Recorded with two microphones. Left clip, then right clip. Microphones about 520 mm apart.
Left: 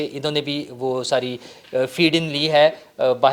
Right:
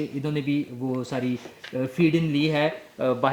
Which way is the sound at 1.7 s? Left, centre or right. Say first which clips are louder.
Left 5 dB; left.